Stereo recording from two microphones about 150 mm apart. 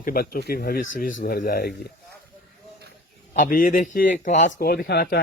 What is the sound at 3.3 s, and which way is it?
Speech, 65° left (ahead or behind).